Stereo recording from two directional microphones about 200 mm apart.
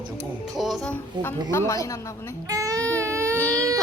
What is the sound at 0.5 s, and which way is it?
Speech, centre (ahead or behind).